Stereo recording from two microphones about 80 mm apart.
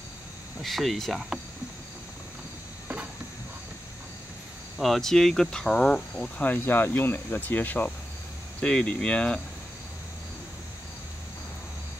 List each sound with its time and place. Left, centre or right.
0.6 s speech: centre
4.7 s speech: centre